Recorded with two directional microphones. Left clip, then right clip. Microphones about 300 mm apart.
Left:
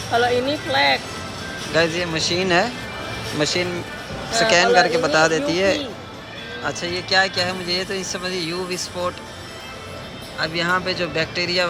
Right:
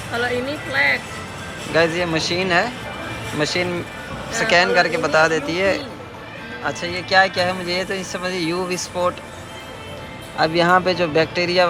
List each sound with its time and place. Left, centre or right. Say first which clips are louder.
0.1 s speech: left 4 dB; left
1.7 s speech: right 2 dB; centre
6.8 s speech: right 3 dB; centre
10.3 s speech: right 6 dB; centre